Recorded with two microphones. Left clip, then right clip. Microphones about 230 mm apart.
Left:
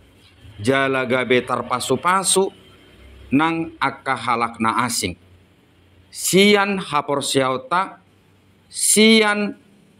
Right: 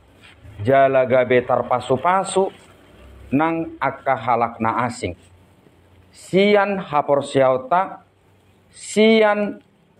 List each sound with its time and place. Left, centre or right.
0.6 s a man's voice: left
6.3 s a man's voice: left
8.9 s a man's voice: left